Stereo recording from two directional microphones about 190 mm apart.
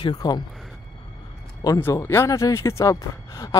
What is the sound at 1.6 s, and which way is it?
Speech, 15° left (ahead or behind).